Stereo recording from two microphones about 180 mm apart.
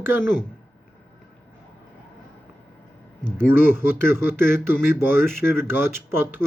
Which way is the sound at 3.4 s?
10° right (ahead or behind).